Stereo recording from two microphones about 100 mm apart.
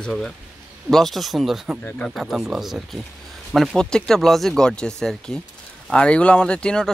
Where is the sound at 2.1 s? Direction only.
Centre (ahead or behind).